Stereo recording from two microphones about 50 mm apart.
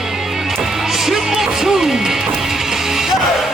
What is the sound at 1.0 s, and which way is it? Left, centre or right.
Speech, centre.